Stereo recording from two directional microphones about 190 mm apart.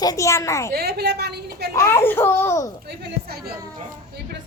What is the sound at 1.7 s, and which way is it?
Speech, 15° left (ahead or behind).